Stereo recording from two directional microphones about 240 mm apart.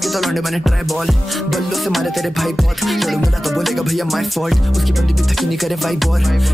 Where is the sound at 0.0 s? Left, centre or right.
Centre.